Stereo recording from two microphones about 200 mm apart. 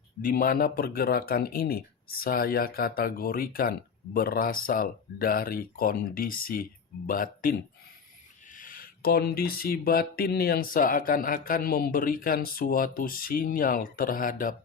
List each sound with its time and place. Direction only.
0.2 s speech: 45° left (ahead or behind)
8.5 s speech: 45° left (ahead or behind)